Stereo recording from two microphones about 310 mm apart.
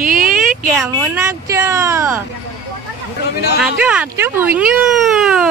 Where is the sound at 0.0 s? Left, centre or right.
Right.